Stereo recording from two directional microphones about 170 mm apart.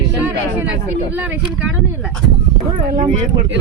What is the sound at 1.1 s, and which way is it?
Speech, 10° right (ahead or behind).